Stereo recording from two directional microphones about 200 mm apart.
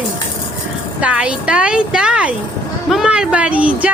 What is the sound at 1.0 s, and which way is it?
A woman's voice, 5° right (ahead or behind).